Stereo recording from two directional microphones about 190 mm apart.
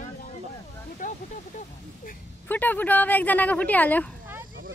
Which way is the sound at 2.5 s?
10° left (ahead or behind).